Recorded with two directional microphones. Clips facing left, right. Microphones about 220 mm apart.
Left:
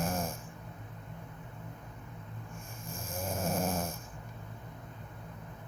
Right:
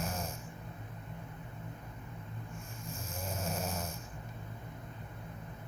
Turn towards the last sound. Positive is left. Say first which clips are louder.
# left 5 dB
turn(degrees=50)  # may be behind; listen again after turning